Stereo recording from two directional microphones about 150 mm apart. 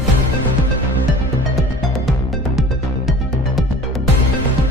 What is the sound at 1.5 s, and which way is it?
Music, centre (ahead or behind).